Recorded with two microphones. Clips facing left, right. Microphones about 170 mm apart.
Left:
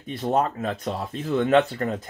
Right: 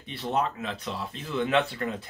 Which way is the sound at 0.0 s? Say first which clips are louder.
Left 5 dB; 45° left (ahead or behind).